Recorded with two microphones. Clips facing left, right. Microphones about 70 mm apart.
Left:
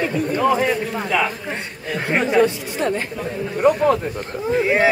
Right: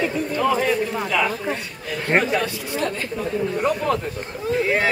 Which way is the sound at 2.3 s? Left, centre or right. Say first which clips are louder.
Left 6 dB; left.